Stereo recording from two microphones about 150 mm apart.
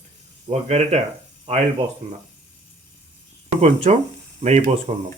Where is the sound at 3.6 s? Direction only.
45° right (ahead or behind).